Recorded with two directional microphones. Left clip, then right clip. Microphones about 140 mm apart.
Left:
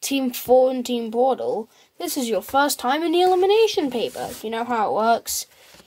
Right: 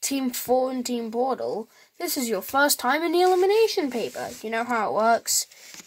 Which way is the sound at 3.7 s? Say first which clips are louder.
Left 3 dB; 15° left (ahead or behind).